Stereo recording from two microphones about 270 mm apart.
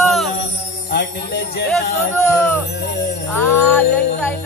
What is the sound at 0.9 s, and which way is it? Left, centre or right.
Speech, left.